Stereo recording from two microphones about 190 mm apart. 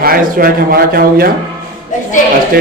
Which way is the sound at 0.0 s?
50° right (ahead or behind).